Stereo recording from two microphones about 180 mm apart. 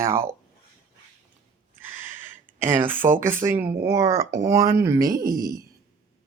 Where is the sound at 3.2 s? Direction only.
50° right (ahead or behind).